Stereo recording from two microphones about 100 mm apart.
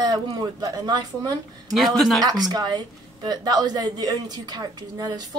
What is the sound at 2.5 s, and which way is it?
A woman's voice, 40° right (ahead or behind).